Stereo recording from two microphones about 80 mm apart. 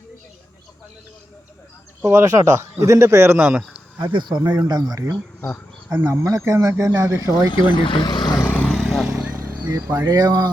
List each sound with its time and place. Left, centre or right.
2.0 s a man's voice: right
3.3 s speech: right
4.1 s speech: right
4.5 s speech: right
5.9 s a man's voice: right
7.4 s speech: left
8.6 s vehicle: centre
9.5 s speech: right